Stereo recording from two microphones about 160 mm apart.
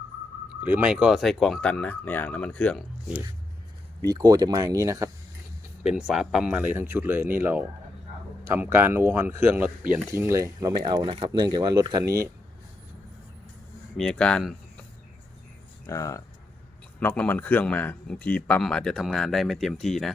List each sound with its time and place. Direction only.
0.6 s speech: 10° right (ahead or behind); by 2.8 s 5° left (ahead or behind)
4.0 s speech: 25° right (ahead or behind)
5.8 s speech: 5° right (ahead or behind)
13.9 s speech: 5° left (ahead or behind)
15.9 s speech: 20° left (ahead or behind); by 20.1 s centre (ahead or behind)